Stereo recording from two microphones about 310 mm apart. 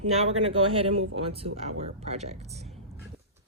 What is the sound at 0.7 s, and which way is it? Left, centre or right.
Speech, centre.